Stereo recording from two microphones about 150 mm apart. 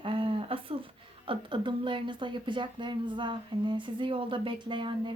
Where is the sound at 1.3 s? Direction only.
35° right (ahead or behind).